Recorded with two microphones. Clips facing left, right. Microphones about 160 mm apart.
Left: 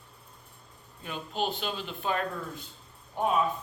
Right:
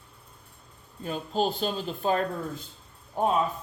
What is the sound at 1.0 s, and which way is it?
A man's voice, 40° right (ahead or behind).